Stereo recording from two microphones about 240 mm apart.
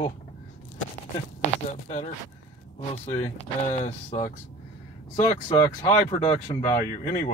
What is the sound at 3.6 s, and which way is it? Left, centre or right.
Speech, left.